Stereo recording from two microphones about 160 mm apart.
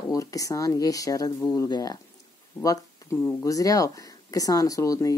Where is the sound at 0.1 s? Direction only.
20° left (ahead or behind).